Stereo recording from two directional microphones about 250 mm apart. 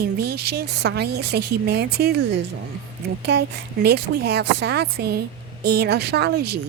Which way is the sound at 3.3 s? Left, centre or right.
Right.